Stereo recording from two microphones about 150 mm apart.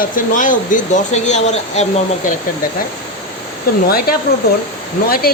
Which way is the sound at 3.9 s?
90° left.